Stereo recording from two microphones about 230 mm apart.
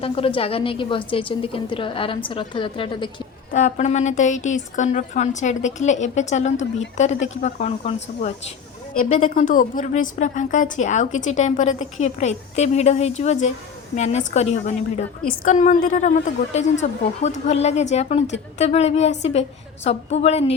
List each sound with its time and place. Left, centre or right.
0.0 s a woman's voice: left
3.5 s a woman's voice: left